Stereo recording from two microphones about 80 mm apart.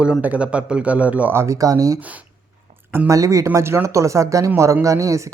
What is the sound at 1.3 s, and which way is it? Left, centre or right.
Speech, right.